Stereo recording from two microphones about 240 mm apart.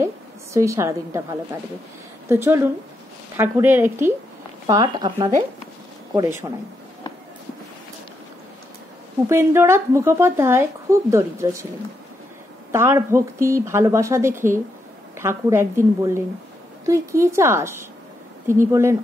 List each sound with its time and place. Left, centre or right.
0.0 s a woman's voice: centre
9.3 s speech: centre
12.7 s speech: centre